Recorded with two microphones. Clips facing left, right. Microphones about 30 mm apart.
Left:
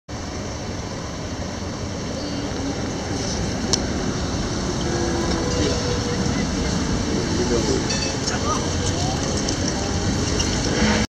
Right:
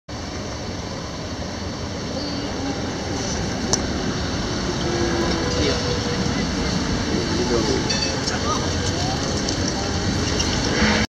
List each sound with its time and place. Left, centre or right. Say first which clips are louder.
3.9 s vehicle: even; centre